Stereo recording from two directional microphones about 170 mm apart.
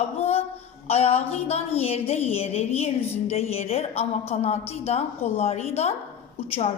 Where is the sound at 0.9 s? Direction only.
35° left (ahead or behind).